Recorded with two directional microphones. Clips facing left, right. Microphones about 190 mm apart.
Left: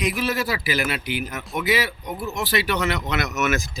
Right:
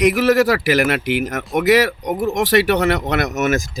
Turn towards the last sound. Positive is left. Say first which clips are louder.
# right 5 dB
turn(degrees=-45)  # may be behind; listen again after turning